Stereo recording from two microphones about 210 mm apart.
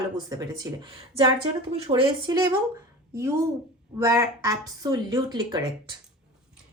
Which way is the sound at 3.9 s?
15° right (ahead or behind).